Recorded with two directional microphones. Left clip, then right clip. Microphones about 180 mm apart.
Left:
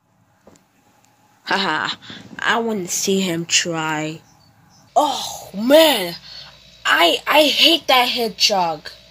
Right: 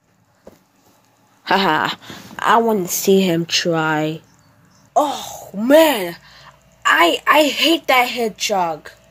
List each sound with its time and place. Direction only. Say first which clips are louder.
1.4 s speech: right 4 dB; 35° right (ahead or behind)
4.9 s speech: even; 15° right (ahead or behind)